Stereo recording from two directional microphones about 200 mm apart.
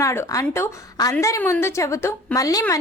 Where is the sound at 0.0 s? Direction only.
15° left (ahead or behind).